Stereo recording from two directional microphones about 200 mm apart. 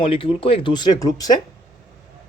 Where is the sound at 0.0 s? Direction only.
25° left (ahead or behind).